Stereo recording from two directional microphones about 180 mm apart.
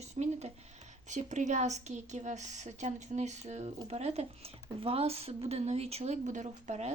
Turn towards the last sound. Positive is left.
turn(degrees=-40)  # may be behind; listen again after turning